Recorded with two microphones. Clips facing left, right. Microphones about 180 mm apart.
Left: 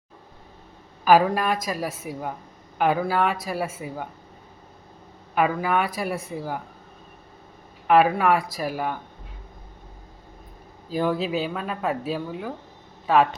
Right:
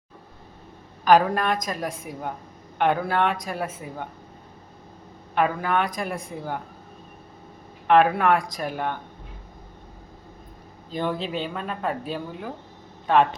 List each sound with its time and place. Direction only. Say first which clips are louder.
1.0 s speech: even; 5° left (ahead or behind)
5.3 s a woman's voice: left 1 dB; 5° left (ahead or behind)
7.9 s speech: even; 5° left (ahead or behind)
10.8 s speech: left 3 dB; 5° left (ahead or behind)